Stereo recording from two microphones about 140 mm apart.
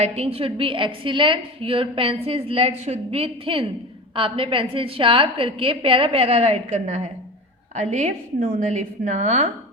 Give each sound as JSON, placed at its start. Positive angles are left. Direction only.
{"t": 0.0, "sound": "a woman's voice", "side_deg": -45}